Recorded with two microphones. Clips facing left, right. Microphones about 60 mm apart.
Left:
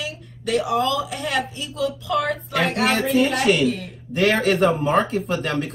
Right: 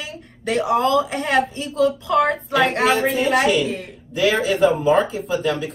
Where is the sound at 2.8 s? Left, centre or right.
Left.